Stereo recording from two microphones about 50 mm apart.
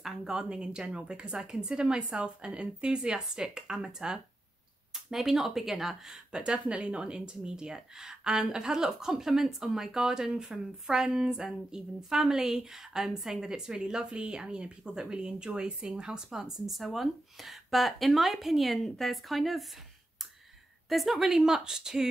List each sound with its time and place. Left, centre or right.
0.0 s a woman's voice: centre
20.9 s speech: centre